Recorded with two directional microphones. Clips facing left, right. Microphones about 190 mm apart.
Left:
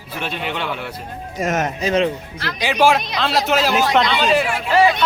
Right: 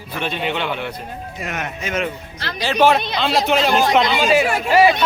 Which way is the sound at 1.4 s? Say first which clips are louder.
Left 8 dB; 45° left (ahead or behind).